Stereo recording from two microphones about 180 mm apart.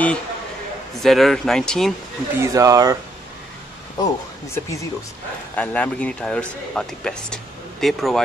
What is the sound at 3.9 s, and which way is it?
Speech, 20° left (ahead or behind).